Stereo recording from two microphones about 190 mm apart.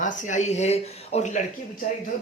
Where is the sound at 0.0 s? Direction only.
40° left (ahead or behind).